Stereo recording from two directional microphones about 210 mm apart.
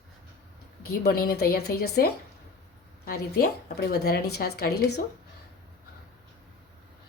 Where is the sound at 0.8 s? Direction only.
50° left (ahead or behind).